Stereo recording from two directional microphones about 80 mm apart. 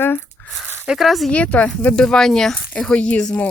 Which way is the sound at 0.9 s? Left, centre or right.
Centre.